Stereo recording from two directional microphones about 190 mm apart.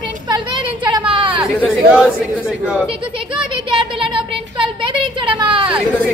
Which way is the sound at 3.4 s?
25° right (ahead or behind).